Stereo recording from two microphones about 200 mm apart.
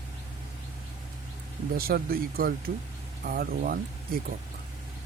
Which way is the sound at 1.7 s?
50° right (ahead or behind).